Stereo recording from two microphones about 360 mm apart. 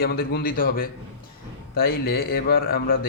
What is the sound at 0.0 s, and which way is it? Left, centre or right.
A man's voice, left.